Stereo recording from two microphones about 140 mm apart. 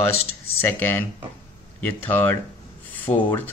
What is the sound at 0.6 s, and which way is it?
Speech, 15° left (ahead or behind).